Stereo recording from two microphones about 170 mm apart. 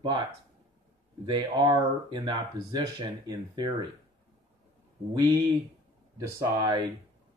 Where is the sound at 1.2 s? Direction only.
25° right (ahead or behind).